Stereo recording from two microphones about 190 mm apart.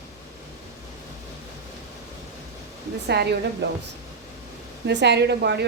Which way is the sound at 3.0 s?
60° right (ahead or behind).